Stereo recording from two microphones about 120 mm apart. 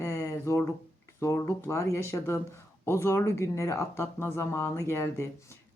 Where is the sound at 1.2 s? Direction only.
25° left (ahead or behind).